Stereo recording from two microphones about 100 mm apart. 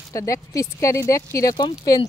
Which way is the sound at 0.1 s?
35° left (ahead or behind).